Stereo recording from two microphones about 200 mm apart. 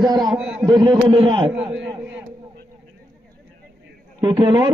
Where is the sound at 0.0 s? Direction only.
20° right (ahead or behind).